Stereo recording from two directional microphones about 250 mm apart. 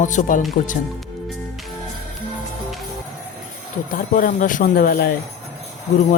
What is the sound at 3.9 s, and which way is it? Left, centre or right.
Speech, left.